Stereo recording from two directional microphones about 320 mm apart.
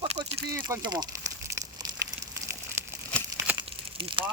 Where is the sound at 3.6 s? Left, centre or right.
Centre.